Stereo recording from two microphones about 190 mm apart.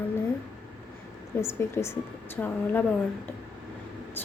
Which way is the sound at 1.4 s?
15° left (ahead or behind).